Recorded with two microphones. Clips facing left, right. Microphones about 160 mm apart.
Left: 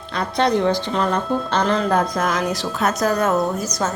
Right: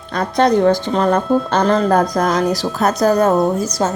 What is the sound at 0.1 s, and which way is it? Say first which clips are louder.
A woman's voice: right 5 dB; 45° right (ahead or behind).